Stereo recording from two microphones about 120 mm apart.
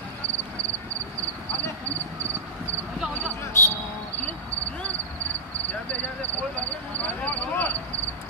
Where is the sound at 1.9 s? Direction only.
20° right (ahead or behind).